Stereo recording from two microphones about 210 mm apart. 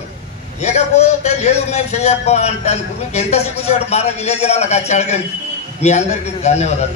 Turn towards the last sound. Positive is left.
turn(degrees=30)  # may be behind; listen again after turning